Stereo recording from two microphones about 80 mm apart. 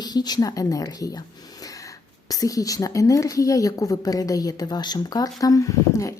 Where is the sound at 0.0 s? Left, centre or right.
Left.